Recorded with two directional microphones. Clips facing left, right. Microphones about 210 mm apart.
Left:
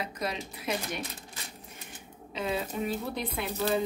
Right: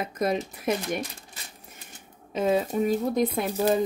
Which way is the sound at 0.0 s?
50° right (ahead or behind).